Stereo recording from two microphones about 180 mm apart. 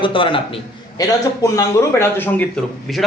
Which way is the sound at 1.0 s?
20° left (ahead or behind).